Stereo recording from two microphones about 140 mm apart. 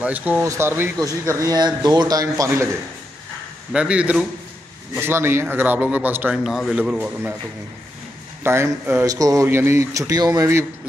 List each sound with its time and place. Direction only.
0.0 s a man's voice: 10° right (ahead or behind)
3.7 s a man's voice: 10° right (ahead or behind)
6.4 s speech: centre (ahead or behind)
8.5 s speech: 15° right (ahead or behind)